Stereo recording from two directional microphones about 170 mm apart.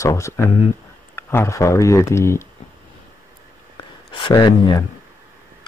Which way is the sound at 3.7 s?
25° left (ahead or behind).